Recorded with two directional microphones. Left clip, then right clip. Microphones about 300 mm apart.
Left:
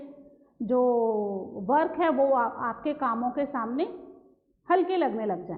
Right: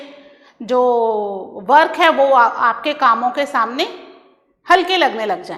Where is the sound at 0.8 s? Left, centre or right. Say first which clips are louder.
Right 10 dB; right.